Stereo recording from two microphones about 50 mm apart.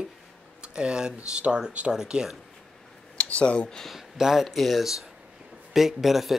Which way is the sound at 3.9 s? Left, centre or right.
Centre.